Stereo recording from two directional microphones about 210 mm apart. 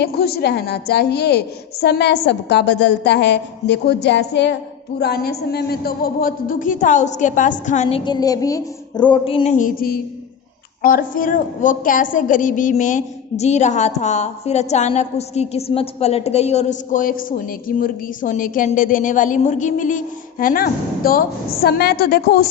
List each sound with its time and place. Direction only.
0.0 s a woman's voice: 50° left (ahead or behind)